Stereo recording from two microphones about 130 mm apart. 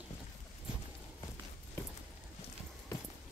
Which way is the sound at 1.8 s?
20° left (ahead or behind).